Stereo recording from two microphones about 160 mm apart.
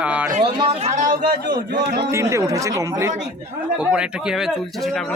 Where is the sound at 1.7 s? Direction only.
80° right.